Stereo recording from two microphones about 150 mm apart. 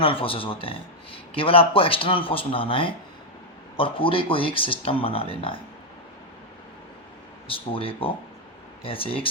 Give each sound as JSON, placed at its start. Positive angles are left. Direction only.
{"t": 0.0, "sound": "speech", "side_deg": 35}
{"t": 7.4, "sound": "speech", "side_deg": 35}